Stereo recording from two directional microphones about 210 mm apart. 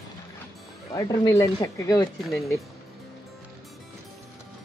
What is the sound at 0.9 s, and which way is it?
Speech, 15° left (ahead or behind).